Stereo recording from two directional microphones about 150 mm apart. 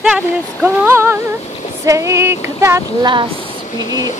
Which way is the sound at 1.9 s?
20° right (ahead or behind).